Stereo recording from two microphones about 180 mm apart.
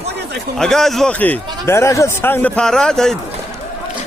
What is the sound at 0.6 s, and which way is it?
A man's voice, centre (ahead or behind).